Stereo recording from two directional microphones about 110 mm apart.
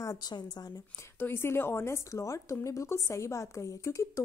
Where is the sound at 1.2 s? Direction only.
20° left (ahead or behind).